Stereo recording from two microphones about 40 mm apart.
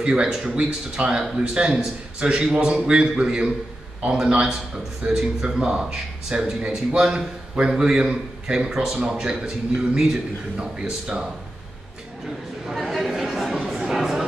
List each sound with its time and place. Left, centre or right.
0.0 s speech: right
12.7 s speech: centre
13.7 s a sound: centre